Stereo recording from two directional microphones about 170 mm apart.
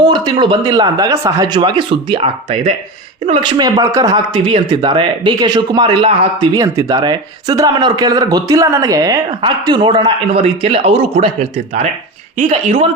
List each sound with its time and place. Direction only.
0.0 s a man's voice: 25° right (ahead or behind); by 12.9 s 40° right (ahead or behind)